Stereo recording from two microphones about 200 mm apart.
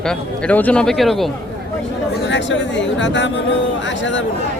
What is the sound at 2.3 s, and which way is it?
Speech, 65° left (ahead or behind).